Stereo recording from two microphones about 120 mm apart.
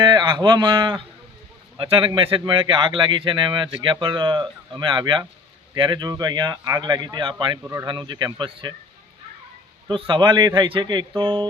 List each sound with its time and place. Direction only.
0.0 s speech: 35° right (ahead or behind)
9.9 s speech: 45° right (ahead or behind)